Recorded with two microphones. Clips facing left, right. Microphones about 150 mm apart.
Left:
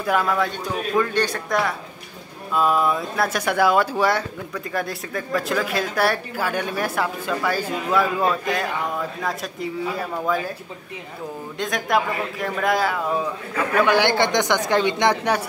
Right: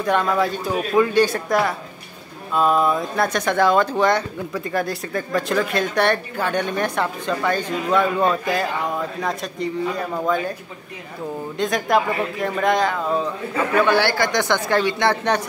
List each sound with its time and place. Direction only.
0.0 s speech: 5° left (ahead or behind)
0.7 s speech: 10° right (ahead or behind)
11.5 s speech: centre (ahead or behind)